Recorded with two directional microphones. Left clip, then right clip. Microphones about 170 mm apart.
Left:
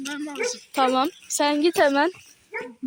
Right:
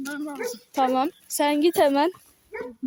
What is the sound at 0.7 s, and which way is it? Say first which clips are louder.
A woman's voice: left 1 dB; 5° right (ahead or behind).